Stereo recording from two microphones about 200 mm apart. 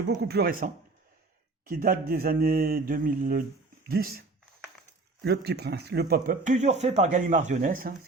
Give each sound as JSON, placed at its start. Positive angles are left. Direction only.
{"t": 0.1, "sound": "speech", "side_deg": -55}
{"t": 5.5, "sound": "speech", "side_deg": -55}